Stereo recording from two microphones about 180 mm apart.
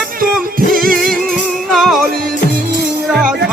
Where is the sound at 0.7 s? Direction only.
Centre (ahead or behind).